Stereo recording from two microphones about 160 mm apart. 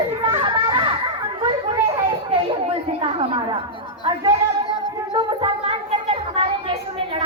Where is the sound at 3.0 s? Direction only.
35° right (ahead or behind).